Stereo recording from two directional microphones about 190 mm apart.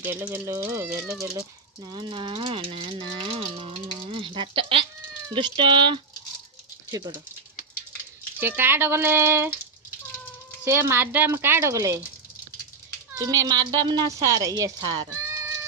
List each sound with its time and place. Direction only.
0.0 s speech: 10° right (ahead or behind)
1.9 s speech: 25° right (ahead or behind)
8.4 s speech: 10° right (ahead or behind)
10.7 s speech: 10° right (ahead or behind)
13.1 s speech: 20° right (ahead or behind)